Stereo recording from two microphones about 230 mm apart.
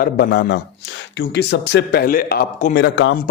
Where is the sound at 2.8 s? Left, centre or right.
Left.